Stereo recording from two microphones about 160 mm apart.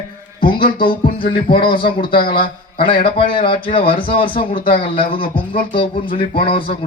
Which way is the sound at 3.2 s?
30° left (ahead or behind).